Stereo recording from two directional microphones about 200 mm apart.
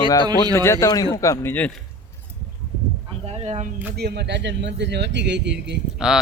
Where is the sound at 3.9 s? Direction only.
55° right (ahead or behind).